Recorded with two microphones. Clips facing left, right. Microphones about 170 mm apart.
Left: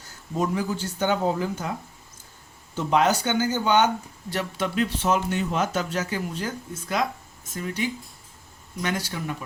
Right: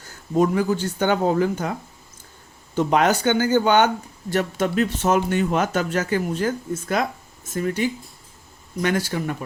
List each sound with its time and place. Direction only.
0.3 s speech: 60° right (ahead or behind)
2.7 s speech: 60° right (ahead or behind)